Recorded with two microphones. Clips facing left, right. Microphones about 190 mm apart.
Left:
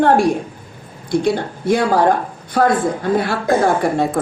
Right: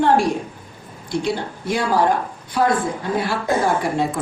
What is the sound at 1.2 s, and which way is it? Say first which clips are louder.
Speech: left 5 dB; 55° left (ahead or behind).